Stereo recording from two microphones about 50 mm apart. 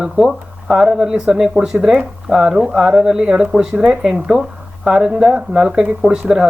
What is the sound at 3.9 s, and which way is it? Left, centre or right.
Speech, centre.